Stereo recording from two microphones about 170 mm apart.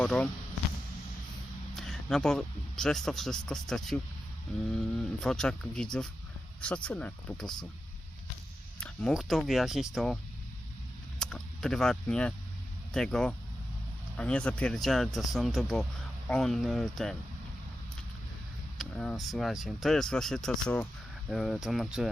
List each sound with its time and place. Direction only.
0.0 s speech: 5° left (ahead or behind)
1.7 s speech: centre (ahead or behind)
8.8 s speech: 5° left (ahead or behind)
11.2 s speech: 5° left (ahead or behind)
18.8 s speech: centre (ahead or behind)